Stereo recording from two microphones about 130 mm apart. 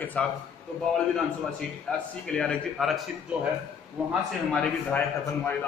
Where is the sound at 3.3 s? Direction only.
10° right (ahead or behind).